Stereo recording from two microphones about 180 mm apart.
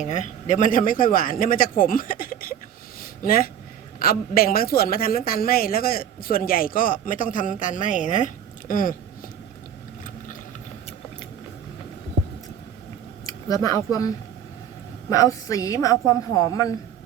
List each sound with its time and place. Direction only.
0.0 s a woman's voice: 40° left (ahead or behind)
3.0 s a sound: 55° left (ahead or behind)
4.0 s a woman's voice: 55° left (ahead or behind)
13.2 s speech: 20° left (ahead or behind)
15.1 s a woman's voice: 20° left (ahead or behind)